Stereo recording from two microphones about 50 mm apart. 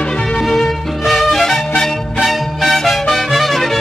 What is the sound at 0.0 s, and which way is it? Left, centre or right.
Music, centre.